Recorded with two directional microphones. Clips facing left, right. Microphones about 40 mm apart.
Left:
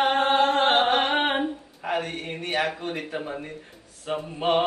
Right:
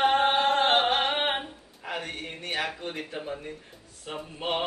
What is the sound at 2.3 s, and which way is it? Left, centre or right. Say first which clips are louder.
A woman's voice: left 5 dB; left.